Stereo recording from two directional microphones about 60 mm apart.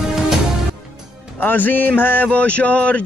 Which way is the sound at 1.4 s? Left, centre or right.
Left.